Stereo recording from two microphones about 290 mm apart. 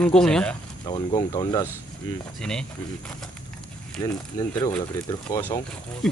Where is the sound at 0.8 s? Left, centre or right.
Centre.